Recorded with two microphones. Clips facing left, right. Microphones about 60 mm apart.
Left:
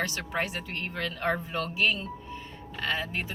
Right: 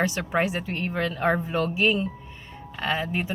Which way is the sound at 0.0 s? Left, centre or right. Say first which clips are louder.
Right 6 dB; centre.